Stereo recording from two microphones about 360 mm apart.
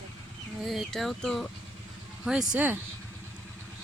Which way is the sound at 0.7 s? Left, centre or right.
Centre.